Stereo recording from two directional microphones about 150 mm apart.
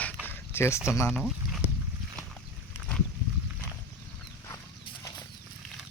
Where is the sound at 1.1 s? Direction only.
5° right (ahead or behind).